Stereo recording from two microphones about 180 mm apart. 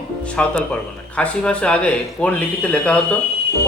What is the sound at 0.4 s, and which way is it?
Speech, 5° left (ahead or behind).